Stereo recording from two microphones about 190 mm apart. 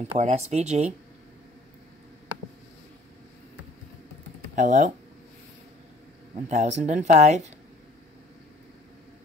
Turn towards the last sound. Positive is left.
turn(degrees=-35)  # may be behind; listen again after turning